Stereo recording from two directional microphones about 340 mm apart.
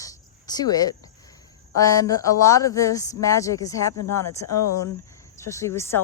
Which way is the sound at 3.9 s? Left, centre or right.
Left.